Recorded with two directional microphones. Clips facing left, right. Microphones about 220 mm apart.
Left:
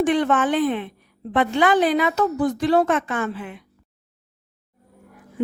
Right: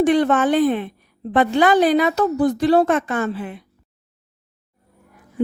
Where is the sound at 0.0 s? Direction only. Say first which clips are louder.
Right 3 dB; 40° right (ahead or behind).